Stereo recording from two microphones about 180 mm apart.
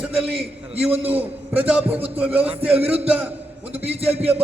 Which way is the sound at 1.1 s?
10° right (ahead or behind).